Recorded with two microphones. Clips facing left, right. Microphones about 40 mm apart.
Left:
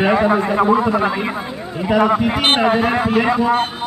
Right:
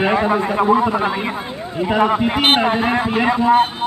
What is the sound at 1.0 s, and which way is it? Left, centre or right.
A man's voice, right.